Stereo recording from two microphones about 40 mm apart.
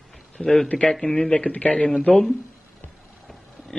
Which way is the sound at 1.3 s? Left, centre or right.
Left.